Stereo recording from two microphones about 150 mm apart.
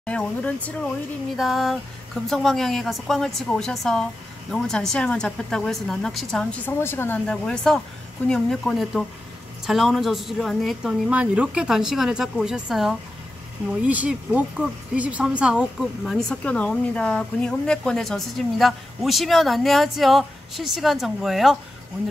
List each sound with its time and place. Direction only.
0.0 s a woman's voice: 5° left (ahead or behind)
6.7 s speech: 15° left (ahead or behind)
7.2 s a woman's voice: 5° left (ahead or behind)